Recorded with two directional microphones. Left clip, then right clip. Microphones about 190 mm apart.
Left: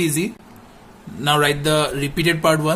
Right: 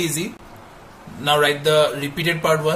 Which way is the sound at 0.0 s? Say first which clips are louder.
Left 3 dB; 35° left (ahead or behind).